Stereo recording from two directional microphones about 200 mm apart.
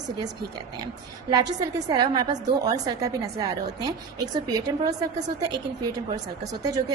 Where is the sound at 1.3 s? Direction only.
20° right (ahead or behind).